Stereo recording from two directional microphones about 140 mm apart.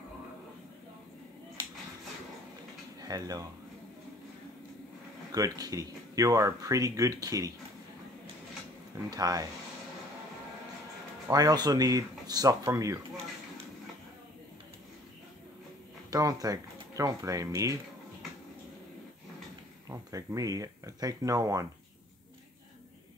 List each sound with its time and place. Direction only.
3.0 s speech: 25° right (ahead or behind)
5.3 s speech: 25° right (ahead or behind)
8.9 s speech: 25° right (ahead or behind)
11.2 s speech: 30° right (ahead or behind)
16.1 s speech: 25° right (ahead or behind)
19.9 s speech: 25° right (ahead or behind)